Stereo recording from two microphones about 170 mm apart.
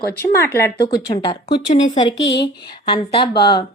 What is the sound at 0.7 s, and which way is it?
Speech, 70° left (ahead or behind).